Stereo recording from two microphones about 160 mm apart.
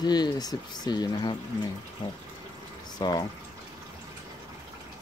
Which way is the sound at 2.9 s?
25° left (ahead or behind).